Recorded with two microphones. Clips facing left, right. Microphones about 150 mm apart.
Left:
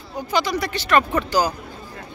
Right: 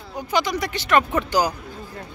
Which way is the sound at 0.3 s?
15° right (ahead or behind).